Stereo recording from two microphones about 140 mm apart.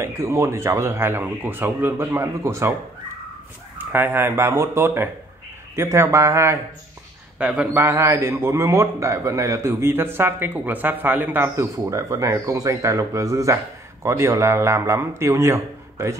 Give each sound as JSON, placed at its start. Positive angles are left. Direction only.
{"t": 0.0, "sound": "speech", "side_deg": -20}
{"t": 3.7, "sound": "a man's voice", "side_deg": -15}
{"t": 7.3, "sound": "a man's voice", "side_deg": -10}